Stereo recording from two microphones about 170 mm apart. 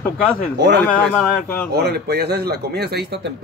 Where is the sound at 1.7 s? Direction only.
70° right (ahead or behind).